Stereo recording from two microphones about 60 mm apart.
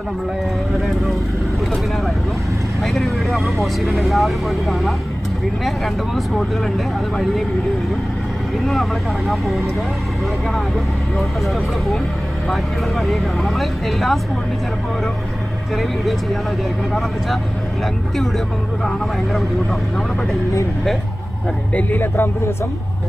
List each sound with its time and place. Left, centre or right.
0.7 s speech: centre
2.8 s speech: centre
6.1 s speech: centre
9.3 s speech: centre
12.4 s speech: centre
21.7 s speech: left